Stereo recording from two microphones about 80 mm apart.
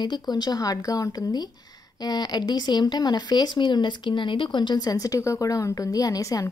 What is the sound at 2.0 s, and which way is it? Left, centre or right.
Speech, left.